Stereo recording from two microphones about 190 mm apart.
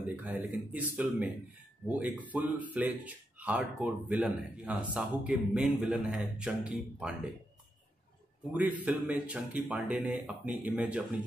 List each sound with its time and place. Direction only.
0.0 s speech: 5° right (ahead or behind)
8.5 s speech: 10° right (ahead or behind)